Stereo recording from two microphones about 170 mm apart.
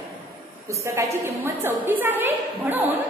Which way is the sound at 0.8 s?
15° right (ahead or behind).